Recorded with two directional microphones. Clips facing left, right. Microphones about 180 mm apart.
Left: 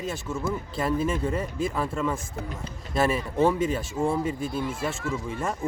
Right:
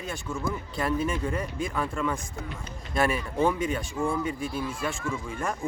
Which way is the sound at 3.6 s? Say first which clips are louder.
Left 2 dB; 25° left (ahead or behind).